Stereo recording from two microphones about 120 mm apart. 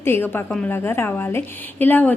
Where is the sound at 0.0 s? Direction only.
20° left (ahead or behind).